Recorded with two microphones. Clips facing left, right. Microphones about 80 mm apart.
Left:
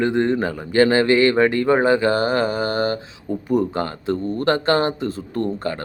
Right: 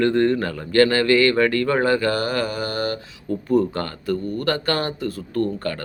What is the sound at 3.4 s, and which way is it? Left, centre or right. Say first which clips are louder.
Speech: even; centre.